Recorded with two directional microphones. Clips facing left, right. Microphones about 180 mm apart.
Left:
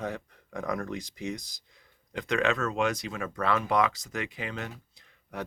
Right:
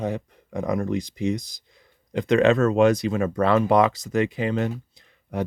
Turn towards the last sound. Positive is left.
turn(degrees=-30)  # may be behind; listen again after turning